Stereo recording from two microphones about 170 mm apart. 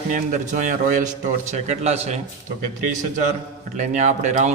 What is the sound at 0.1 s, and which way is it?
A man's voice, 50° right (ahead or behind).